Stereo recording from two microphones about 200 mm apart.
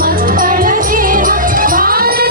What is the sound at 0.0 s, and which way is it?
Music, 45° right (ahead or behind).